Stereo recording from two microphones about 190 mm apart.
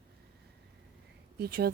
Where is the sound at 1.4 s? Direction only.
55° right (ahead or behind).